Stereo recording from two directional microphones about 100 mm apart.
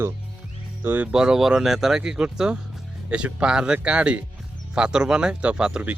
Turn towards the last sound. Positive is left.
turn(degrees=-10)  # may be behind; listen again after turning